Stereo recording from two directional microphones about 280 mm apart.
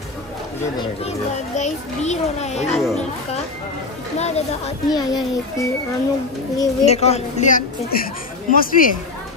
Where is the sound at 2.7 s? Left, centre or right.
Centre.